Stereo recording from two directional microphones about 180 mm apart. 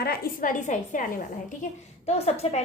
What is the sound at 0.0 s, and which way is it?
A woman's voice, 55° left (ahead or behind).